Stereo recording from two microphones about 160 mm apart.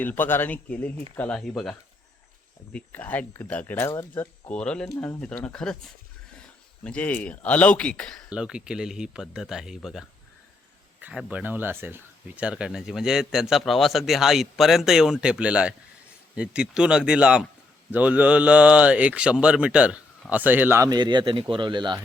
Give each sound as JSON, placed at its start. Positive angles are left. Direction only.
{"t": 0.0, "sound": "speech", "side_deg": 10}
{"t": 2.7, "sound": "speech", "side_deg": 10}
{"t": 8.3, "sound": "speech", "side_deg": -5}